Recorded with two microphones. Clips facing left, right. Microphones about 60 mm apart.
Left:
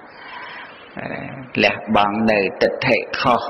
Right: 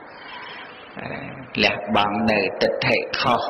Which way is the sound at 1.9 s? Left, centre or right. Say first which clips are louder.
Left 4 dB; right.